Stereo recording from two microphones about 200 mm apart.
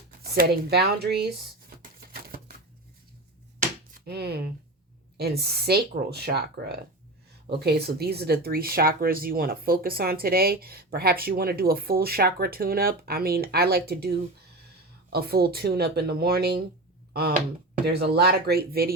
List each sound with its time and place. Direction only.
0.2 s speech: 50° right (ahead or behind)
2.0 s typewriter: 50° right (ahead or behind)
3.9 s speech: 55° right (ahead or behind)
17.8 s speech: 55° right (ahead or behind)